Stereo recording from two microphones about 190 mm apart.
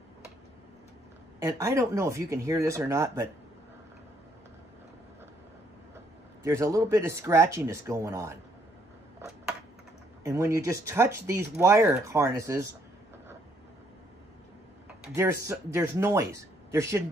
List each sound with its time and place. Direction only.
1.4 s speech: 15° right (ahead or behind)
6.4 s speech: 15° right (ahead or behind)
10.2 s speech: 15° right (ahead or behind)
15.4 s speech: 15° right (ahead or behind)